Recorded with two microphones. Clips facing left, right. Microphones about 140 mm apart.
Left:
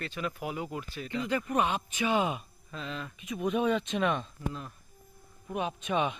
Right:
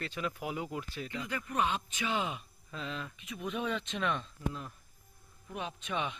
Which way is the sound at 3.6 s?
15° left (ahead or behind).